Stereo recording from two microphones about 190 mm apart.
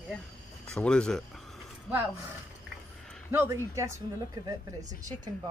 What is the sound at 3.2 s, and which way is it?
Speech, 10° right (ahead or behind).